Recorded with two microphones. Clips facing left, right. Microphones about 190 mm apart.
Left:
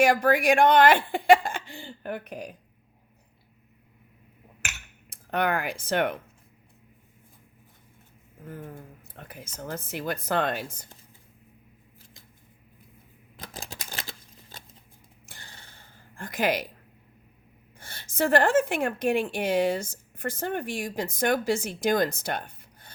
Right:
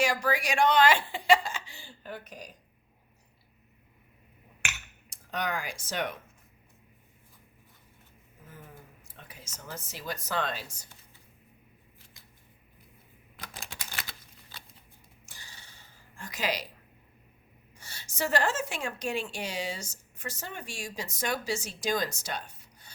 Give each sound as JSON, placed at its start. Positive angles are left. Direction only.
{"t": 0.0, "sound": "a woman's voice", "side_deg": 55}
{"t": 5.0, "sound": "speech", "side_deg": 60}
{"t": 8.4, "sound": "a woman's voice", "side_deg": 55}
{"t": 13.5, "sound": "typewriter", "side_deg": 35}
{"t": 14.5, "sound": "scissors", "side_deg": 45}
{"t": 15.3, "sound": "a sound", "side_deg": 55}
{"t": 17.7, "sound": "a woman's voice", "side_deg": 55}